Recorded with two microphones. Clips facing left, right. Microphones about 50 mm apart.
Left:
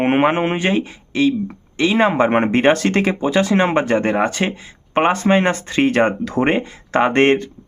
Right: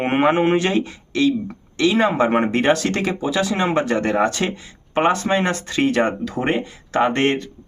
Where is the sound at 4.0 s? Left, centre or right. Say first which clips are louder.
Left 1 dB; left.